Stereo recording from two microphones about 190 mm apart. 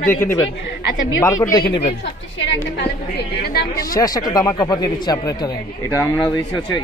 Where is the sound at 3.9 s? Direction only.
20° left (ahead or behind).